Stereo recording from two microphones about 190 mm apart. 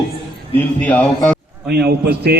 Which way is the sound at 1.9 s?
55° right (ahead or behind).